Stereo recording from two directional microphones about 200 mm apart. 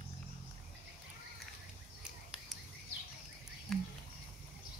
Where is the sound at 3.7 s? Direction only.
Centre (ahead or behind).